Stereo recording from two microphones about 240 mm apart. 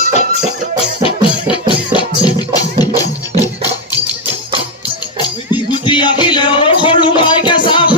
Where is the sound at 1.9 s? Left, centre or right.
Centre.